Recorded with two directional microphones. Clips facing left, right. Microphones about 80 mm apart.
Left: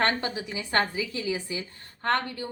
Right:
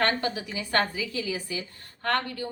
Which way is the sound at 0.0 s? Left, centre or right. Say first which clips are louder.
Even; left.